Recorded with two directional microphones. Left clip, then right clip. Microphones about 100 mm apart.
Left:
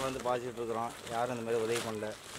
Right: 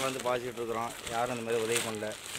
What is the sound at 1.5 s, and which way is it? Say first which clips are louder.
Speech: right 2 dB; 15° right (ahead or behind).